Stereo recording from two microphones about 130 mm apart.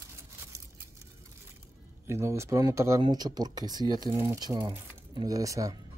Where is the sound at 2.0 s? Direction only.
20° right (ahead or behind).